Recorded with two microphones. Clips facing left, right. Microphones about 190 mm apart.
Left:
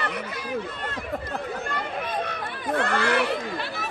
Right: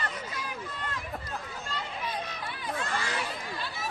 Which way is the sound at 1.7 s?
60° left (ahead or behind).